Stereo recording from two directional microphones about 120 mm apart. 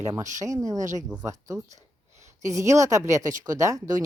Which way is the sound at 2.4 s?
25° right (ahead or behind).